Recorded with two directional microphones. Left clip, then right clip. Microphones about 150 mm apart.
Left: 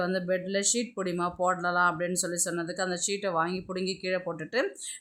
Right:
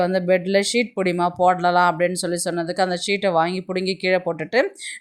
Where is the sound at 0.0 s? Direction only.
30° right (ahead or behind).